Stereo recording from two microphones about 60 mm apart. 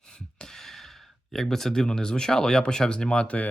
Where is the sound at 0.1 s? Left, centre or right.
Centre.